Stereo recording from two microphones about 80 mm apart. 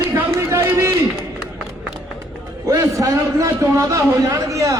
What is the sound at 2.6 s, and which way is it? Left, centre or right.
A man's voice, right.